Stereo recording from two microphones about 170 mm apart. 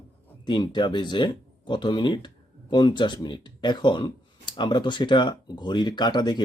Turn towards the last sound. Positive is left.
turn(degrees=25)  # may be behind; listen again after turning